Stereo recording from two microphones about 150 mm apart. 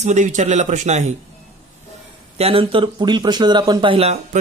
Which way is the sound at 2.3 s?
40° right (ahead or behind).